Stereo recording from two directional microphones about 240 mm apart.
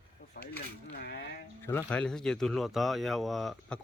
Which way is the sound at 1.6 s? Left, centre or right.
Centre.